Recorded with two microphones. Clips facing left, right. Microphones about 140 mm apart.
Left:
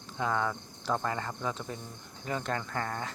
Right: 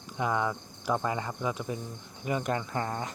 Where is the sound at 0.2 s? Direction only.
15° right (ahead or behind).